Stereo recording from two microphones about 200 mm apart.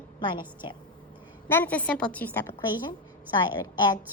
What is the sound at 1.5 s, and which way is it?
Speech, 10° left (ahead or behind).